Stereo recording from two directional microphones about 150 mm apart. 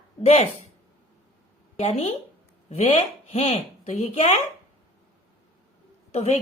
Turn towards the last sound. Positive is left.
turn(degrees=45)  # may be behind; listen again after turning